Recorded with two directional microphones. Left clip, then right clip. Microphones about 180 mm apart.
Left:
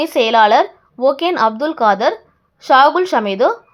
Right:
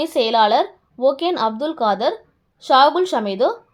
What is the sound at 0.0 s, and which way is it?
A woman's voice, 15° left (ahead or behind).